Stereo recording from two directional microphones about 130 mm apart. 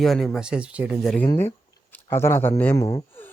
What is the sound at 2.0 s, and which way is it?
Speech, 20° left (ahead or behind).